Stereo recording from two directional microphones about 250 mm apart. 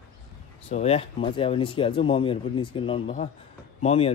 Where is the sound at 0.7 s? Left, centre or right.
Left.